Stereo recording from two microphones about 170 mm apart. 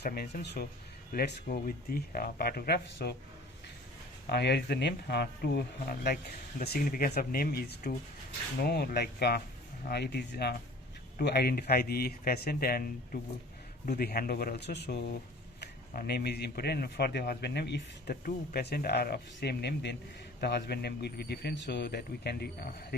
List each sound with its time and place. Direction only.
0.0 s speech: 60° left (ahead or behind)
4.3 s speech: 75° left (ahead or behind)
15.6 s speech: 65° left (ahead or behind); by 20.0 s 85° left
20.4 s speech: 75° left (ahead or behind)